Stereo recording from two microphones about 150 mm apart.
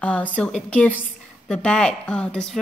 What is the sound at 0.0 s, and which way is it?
A woman's voice, 10° left (ahead or behind).